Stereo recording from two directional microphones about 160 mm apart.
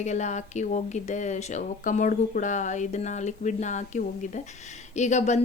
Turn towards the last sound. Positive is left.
turn(degrees=45)  # may be behind; listen again after turning